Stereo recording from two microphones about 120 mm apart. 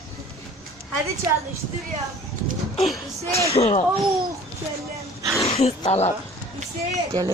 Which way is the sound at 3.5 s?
60° left (ahead or behind).